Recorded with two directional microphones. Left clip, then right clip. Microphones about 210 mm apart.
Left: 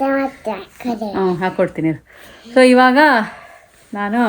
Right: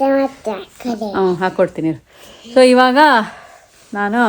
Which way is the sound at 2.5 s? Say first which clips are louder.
Right 1 dB; 20° right (ahead or behind).